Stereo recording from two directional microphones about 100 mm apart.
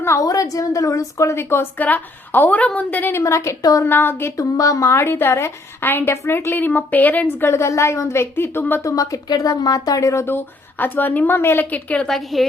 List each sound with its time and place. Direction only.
0.0 s a woman's voice: 30° left (ahead or behind)
3.8 s a woman's voice: 20° left (ahead or behind)
4.4 s a woman's voice: 35° left (ahead or behind)
8.8 s a woman's voice: 35° left (ahead or behind); by 12.5 s centre (ahead or behind)